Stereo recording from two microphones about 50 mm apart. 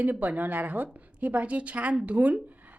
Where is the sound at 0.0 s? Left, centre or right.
Right.